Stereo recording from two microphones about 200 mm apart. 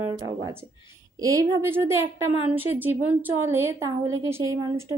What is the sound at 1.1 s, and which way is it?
A woman's voice, 15° right (ahead or behind).